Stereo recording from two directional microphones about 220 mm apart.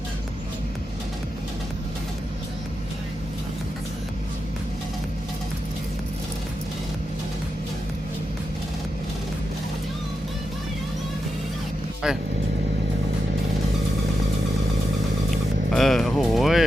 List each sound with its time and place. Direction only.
12.0 s speech: 5° right (ahead or behind)
15.7 s music: centre (ahead or behind)